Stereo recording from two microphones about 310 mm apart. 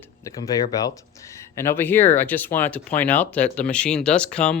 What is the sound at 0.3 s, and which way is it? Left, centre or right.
Speech, centre.